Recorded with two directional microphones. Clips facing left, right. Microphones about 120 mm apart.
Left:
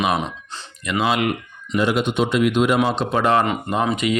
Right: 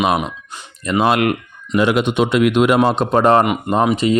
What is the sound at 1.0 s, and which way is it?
Speech, 60° right (ahead or behind).